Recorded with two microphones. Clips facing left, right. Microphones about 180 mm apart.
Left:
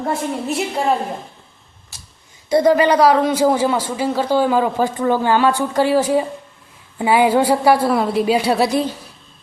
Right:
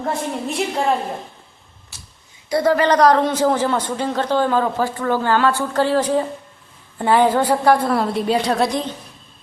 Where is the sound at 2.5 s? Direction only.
15° left (ahead or behind).